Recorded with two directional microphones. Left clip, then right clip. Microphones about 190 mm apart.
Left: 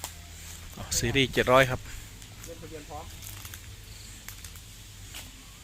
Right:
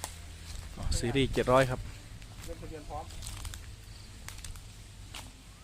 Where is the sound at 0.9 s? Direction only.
Centre (ahead or behind).